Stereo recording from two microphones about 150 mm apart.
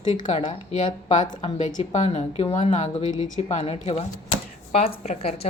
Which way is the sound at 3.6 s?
45° left (ahead or behind).